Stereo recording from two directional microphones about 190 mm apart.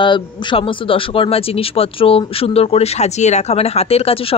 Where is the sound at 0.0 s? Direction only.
25° left (ahead or behind).